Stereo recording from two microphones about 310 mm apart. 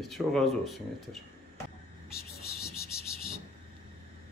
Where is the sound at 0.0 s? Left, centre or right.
Centre.